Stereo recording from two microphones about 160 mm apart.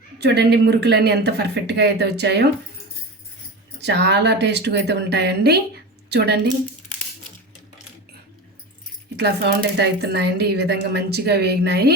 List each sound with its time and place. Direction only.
0.2 s speech: 90° right
3.8 s a woman's voice: 90° right
9.1 s speech: 90° right